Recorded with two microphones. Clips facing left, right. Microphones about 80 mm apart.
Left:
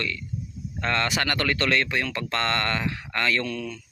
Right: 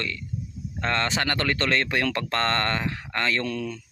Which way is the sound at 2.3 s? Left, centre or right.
Right.